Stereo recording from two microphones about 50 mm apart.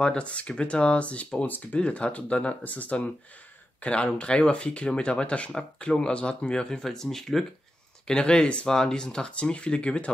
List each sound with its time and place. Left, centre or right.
0.0 s speech: left
1.8 s speech: left